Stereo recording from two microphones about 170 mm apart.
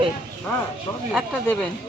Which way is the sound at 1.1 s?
5° left (ahead or behind).